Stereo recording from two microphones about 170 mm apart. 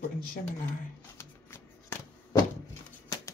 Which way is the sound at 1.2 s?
15° left (ahead or behind).